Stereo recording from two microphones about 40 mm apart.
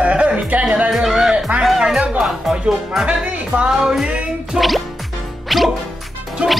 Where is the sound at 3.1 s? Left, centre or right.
Right.